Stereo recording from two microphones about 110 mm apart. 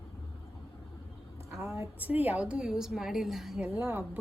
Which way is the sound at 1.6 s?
25° right (ahead or behind).